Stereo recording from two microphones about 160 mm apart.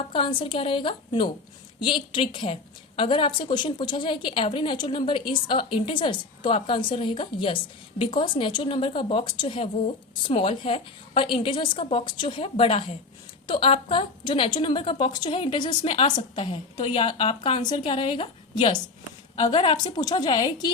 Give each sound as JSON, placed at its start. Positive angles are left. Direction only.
{"t": 0.1, "sound": "a woman's voice", "side_deg": 30}